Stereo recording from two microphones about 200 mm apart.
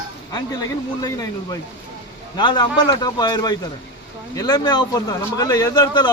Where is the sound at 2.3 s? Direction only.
20° left (ahead or behind).